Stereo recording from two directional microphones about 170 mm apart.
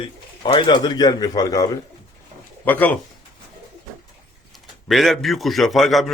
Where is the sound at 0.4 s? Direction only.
25° left (ahead or behind); by 2.9 s 10° left (ahead or behind).